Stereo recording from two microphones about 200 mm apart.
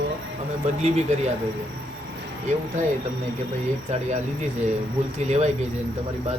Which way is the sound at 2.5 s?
35° right (ahead or behind).